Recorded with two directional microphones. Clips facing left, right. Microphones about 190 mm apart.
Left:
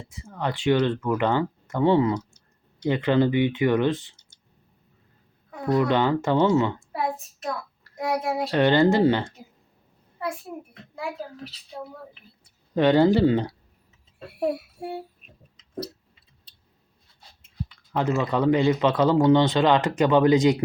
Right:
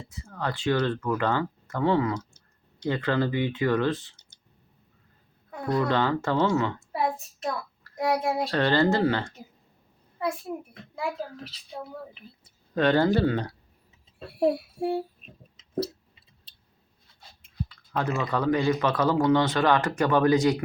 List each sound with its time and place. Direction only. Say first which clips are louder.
0.1 s speech: left 3 dB; 15° left (ahead or behind)
5.7 s speech: left 3 dB; 15° left (ahead or behind)
7.9 s speech: even; centre (ahead or behind)
8.4 s speech: left 5 dB; 15° left (ahead or behind)
12.7 s speech: left 4 dB; 15° left (ahead or behind)
14.3 s a sound: right 2 dB; 30° right (ahead or behind)
17.7 s speech: left 4 dB; 20° left (ahead or behind)